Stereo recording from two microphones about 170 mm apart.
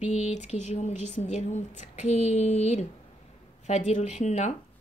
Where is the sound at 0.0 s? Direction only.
45° left (ahead or behind).